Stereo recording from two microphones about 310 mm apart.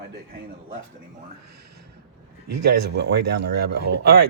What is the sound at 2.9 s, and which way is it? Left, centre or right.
Speech, right.